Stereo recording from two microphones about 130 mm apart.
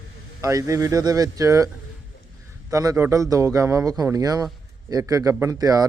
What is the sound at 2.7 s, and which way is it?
Speech, 25° right (ahead or behind).